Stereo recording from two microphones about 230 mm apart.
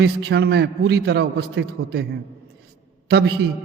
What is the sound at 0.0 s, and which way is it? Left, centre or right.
A man's voice, right.